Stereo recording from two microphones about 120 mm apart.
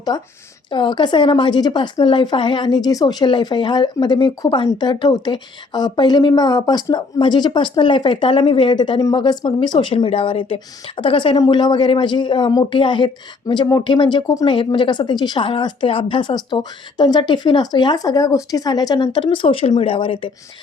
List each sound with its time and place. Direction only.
0.1 s speech: 35° left (ahead or behind)
9.5 s a woman's voice: 45° left (ahead or behind)